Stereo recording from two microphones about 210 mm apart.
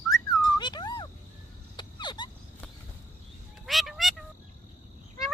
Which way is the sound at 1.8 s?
20° left (ahead or behind).